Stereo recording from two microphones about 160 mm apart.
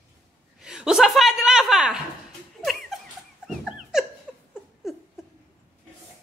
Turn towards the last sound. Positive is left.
turn(degrees=-5)  # may be behind; listen again after turning